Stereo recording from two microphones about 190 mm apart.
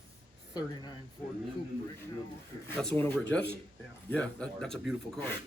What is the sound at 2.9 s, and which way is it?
Speech, 10° left (ahead or behind).